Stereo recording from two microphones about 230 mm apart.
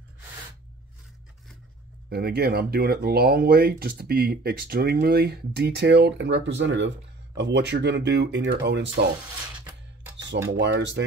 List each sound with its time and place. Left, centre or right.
2.0 s speech: right
10.1 s a sound: right
10.6 s speech: right